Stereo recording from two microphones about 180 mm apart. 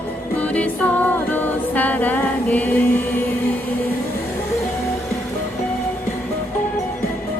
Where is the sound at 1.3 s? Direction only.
10° left (ahead or behind).